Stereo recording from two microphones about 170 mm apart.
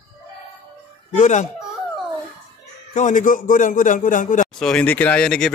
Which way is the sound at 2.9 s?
45° left (ahead or behind).